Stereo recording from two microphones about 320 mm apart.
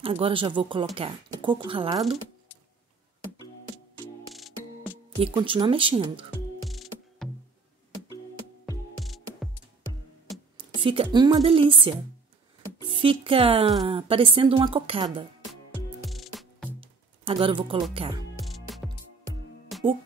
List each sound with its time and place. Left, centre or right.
0.0 s a woman's voice: centre
4.0 s music: centre
5.2 s a woman's voice: centre
6.3 s music: centre
8.6 s music: centre
10.6 s a woman's voice: centre
16.1 s music: centre
16.8 s music: centre
17.9 s a woman's voice: centre
18.4 s music: centre